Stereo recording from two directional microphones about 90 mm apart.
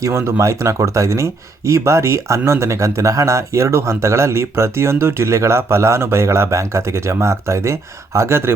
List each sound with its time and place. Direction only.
0.0 s speech: 30° right (ahead or behind)